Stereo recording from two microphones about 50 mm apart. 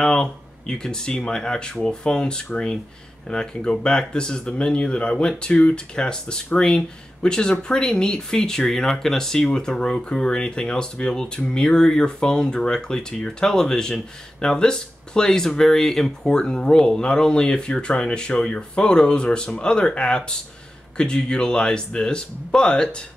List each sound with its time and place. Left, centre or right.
0.0 s speech: centre